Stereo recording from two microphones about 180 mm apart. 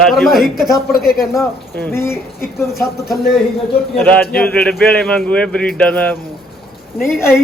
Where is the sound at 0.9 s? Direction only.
55° left (ahead or behind).